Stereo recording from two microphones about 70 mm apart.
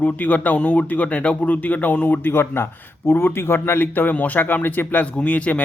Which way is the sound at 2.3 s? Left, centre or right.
Left.